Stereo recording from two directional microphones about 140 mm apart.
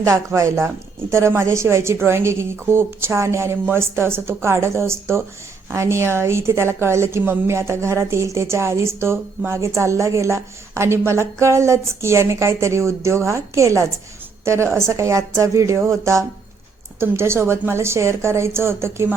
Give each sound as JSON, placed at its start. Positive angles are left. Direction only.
{"t": 0.0, "sound": "a woman's voice", "side_deg": -20}